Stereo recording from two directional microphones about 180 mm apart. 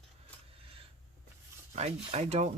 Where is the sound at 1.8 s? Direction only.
35° right (ahead or behind).